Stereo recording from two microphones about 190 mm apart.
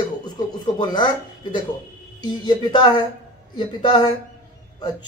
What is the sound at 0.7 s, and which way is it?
Speech, 25° left (ahead or behind).